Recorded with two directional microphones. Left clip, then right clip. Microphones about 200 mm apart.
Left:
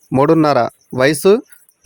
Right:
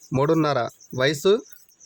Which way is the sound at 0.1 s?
30° left (ahead or behind).